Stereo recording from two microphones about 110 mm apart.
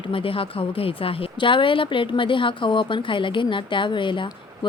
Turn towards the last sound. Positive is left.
turn(degrees=50)  # may be behind; listen again after turning